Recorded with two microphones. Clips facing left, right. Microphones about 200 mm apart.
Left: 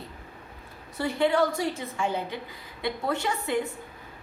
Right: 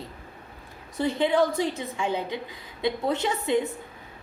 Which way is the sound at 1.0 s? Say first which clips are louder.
Right 1 dB; 20° right (ahead or behind).